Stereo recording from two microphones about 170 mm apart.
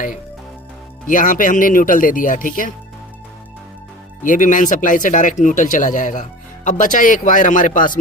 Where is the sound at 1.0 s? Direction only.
50° left (ahead or behind).